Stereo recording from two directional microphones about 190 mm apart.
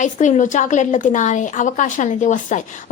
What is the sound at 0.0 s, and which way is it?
A woman's voice, 40° left (ahead or behind).